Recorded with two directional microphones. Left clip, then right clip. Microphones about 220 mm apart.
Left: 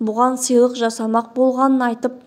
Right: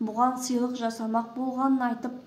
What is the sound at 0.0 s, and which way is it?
A woman's voice, 40° left (ahead or behind).